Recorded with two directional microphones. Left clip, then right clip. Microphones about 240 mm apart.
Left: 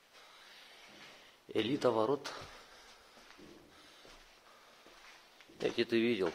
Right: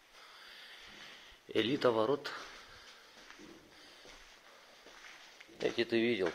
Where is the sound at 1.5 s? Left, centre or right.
Centre.